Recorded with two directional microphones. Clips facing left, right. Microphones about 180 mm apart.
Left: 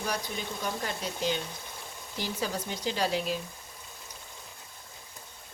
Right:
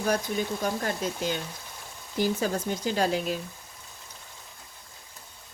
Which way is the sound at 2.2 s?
50° right (ahead or behind).